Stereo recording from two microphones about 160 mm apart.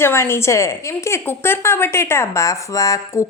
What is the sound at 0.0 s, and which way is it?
A woman's voice, 15° left (ahead or behind).